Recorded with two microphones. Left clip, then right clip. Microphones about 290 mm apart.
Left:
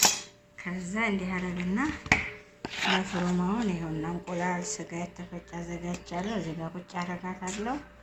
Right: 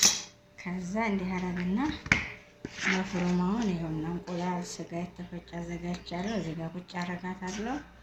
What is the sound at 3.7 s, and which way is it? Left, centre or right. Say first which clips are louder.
Speech: left 1 dB; centre.